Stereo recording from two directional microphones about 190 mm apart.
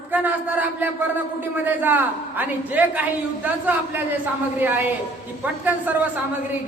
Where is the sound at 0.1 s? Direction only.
10° right (ahead or behind).